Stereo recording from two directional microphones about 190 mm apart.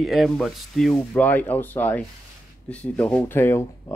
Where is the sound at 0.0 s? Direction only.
Centre (ahead or behind).